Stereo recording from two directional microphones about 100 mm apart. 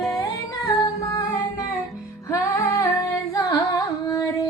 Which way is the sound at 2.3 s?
35° left (ahead or behind).